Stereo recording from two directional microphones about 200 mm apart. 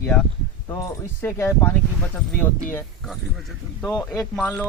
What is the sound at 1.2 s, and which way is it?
Speech, 10° left (ahead or behind).